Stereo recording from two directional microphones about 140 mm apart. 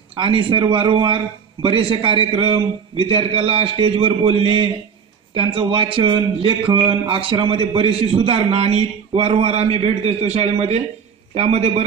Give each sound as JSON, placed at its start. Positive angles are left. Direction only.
{"t": 0.1, "sound": "a man's voice", "side_deg": -40}